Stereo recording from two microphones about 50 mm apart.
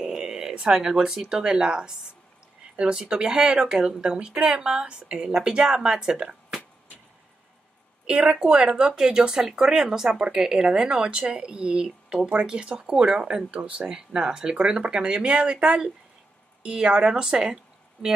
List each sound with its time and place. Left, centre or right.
0.0 s speech: centre
8.1 s speech: centre